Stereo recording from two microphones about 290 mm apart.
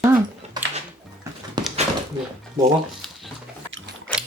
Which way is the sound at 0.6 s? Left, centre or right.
Centre.